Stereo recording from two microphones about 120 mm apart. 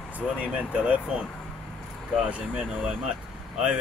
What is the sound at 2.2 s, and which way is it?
Speech, 5° right (ahead or behind).